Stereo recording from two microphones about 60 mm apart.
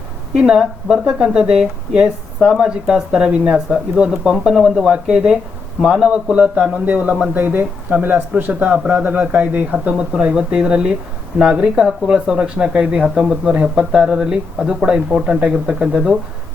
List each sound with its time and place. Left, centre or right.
0.3 s a man's voice: centre